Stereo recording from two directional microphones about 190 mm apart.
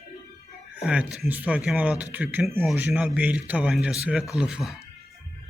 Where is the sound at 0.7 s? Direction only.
5° right (ahead or behind).